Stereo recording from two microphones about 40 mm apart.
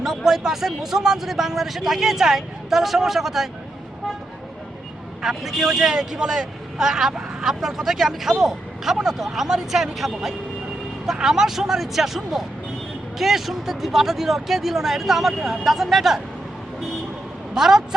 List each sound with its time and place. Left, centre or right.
0.0 s speech: centre
5.2 s speech: centre
17.5 s speech: centre